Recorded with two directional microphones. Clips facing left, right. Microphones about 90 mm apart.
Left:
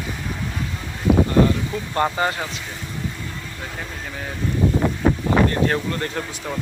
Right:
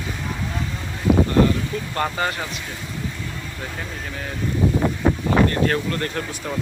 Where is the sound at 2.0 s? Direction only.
20° left (ahead or behind).